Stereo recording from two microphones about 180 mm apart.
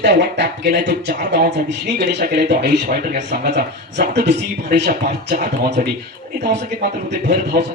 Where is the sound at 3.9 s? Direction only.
70° right (ahead or behind); by 5.9 s 55° right (ahead or behind).